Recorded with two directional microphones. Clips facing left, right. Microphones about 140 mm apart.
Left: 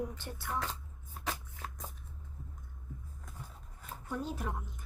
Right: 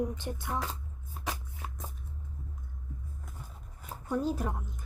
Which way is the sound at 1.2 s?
10° right (ahead or behind).